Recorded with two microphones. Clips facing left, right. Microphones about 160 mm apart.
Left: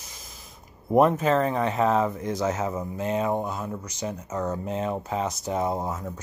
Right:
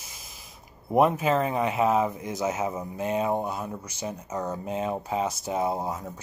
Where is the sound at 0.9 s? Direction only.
5° right (ahead or behind).